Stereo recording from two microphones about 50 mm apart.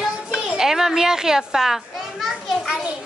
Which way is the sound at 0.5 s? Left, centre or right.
Centre.